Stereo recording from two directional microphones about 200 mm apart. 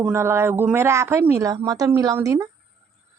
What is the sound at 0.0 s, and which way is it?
Speech, 10° right (ahead or behind).